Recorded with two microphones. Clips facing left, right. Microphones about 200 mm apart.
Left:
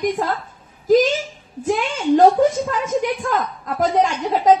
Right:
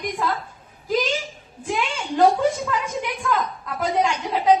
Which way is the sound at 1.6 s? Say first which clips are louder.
Left 7 dB; 40° left (ahead or behind).